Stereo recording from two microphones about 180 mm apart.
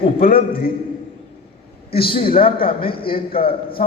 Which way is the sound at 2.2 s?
55° left (ahead or behind).